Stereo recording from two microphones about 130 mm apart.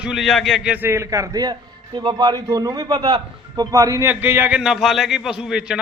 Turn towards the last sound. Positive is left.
turn(degrees=-5)  # may be behind; listen again after turning